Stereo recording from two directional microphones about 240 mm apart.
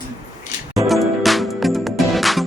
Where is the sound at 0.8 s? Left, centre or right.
Centre.